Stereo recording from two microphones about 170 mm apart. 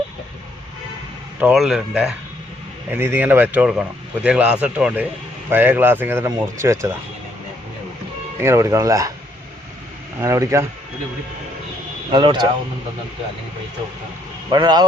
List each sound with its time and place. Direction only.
1.4 s speech: 5° right (ahead or behind)
8.4 s speech: 15° right (ahead or behind)
10.2 s speech: 15° right (ahead or behind)
12.1 s speech: 25° right (ahead or behind)
14.5 s speech: 25° right (ahead or behind)